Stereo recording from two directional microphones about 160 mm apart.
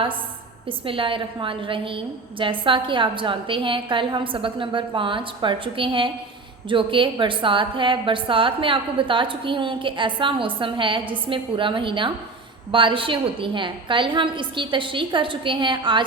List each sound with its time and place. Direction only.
0.9 s a woman's voice: 35° right (ahead or behind)